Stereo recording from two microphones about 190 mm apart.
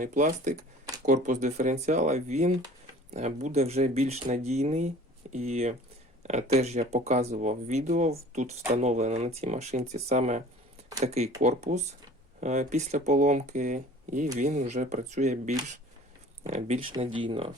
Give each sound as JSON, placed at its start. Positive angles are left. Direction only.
{"t": 0.0, "sound": "speech", "side_deg": -45}